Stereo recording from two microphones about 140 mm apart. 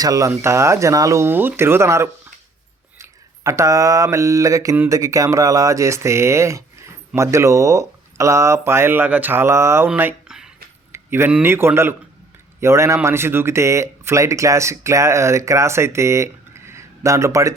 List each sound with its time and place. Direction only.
0.0 s speech: 25° right (ahead or behind); by 10.5 s 5° right (ahead or behind)
10.9 s speech: 15° right (ahead or behind)